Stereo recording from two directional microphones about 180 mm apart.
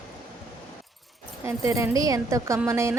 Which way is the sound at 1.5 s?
15° right (ahead or behind).